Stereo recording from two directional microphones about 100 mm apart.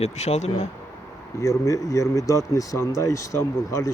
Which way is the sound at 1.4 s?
35° left (ahead or behind).